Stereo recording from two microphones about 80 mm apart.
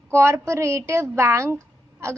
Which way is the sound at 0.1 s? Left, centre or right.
Right.